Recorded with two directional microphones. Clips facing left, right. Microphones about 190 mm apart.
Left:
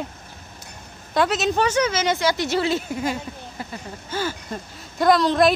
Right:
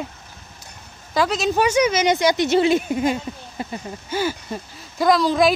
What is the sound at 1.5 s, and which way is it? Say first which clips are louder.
A woman's voice: right 3 dB; 10° right (ahead or behind).